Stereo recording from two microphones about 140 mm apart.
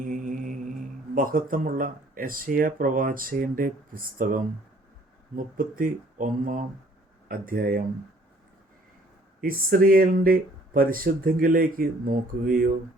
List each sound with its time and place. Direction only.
0.0 s music: 65° right (ahead or behind)
1.1 s speech: 80° right
5.5 s speech: 80° right
7.3 s speech: 90° right
9.4 s speech: 90° right